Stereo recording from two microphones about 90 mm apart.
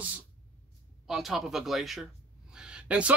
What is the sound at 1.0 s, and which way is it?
Speech, 5° right (ahead or behind).